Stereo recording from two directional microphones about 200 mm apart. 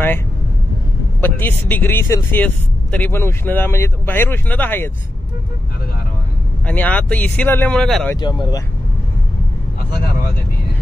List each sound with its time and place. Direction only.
1.2 s speech: 10° left (ahead or behind)
6.6 s speech: 5° left (ahead or behind)
8.2 s speech: 20° left (ahead or behind)